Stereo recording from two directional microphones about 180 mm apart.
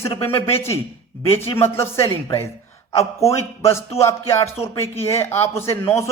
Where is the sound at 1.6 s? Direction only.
15° left (ahead or behind).